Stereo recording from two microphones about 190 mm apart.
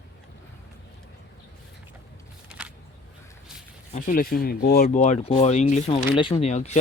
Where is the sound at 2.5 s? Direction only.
5° right (ahead or behind).